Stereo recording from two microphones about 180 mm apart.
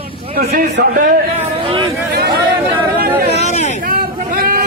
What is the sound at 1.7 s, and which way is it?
Speech, 30° right (ahead or behind).